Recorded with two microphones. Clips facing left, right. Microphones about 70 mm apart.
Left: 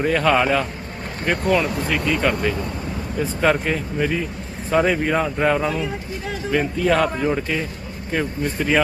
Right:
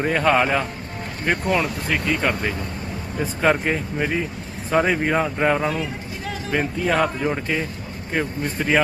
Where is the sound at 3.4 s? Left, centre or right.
Centre.